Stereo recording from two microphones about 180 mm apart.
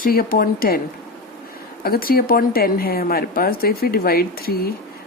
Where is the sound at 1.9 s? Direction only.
55° left (ahead or behind).